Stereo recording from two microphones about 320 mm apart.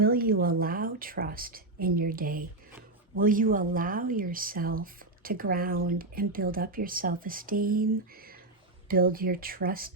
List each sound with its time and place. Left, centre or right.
0.0 s a woman's voice: right